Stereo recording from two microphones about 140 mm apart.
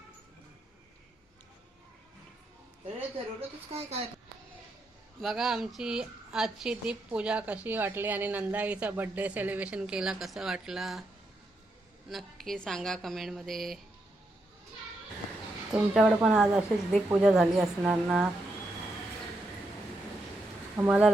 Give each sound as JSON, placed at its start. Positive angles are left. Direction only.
{"t": 3.7, "sound": "a woman's voice", "side_deg": -50}
{"t": 5.2, "sound": "speech", "side_deg": 0}
{"t": 12.0, "sound": "a woman's voice", "side_deg": 0}
{"t": 15.7, "sound": "a woman's voice", "side_deg": -5}
{"t": 20.7, "sound": "speech", "side_deg": -10}